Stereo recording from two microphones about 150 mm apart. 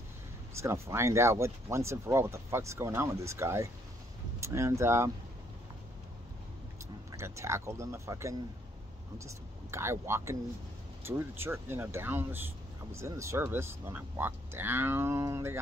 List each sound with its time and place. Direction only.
0.6 s speech: 20° right (ahead or behind)
7.1 s speech: 20° right (ahead or behind)